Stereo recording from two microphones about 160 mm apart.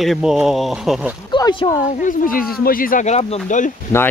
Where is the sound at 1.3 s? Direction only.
30° left (ahead or behind).